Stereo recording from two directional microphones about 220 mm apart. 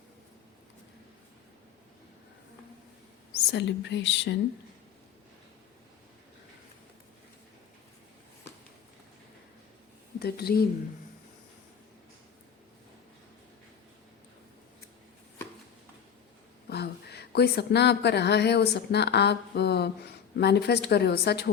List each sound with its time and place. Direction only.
3.3 s a woman's voice: 50° left (ahead or behind)
10.2 s a woman's voice: 45° left (ahead or behind)
16.6 s speech: 45° left (ahead or behind)